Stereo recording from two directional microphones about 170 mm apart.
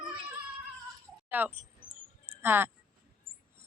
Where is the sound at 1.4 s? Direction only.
10° right (ahead or behind).